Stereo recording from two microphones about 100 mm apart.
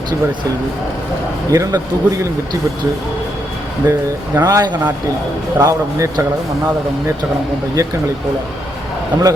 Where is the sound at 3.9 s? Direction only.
20° right (ahead or behind).